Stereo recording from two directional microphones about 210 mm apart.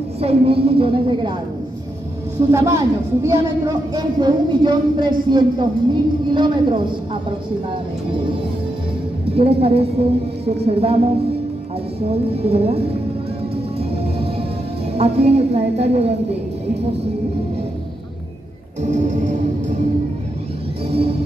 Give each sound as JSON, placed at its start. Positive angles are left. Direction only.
{"t": 0.2, "sound": "speech", "side_deg": -30}
{"t": 2.5, "sound": "speech", "side_deg": -15}
{"t": 12.1, "sound": "speech", "side_deg": -30}
{"t": 15.0, "sound": "speech", "side_deg": -30}
{"t": 18.8, "sound": "music", "side_deg": -35}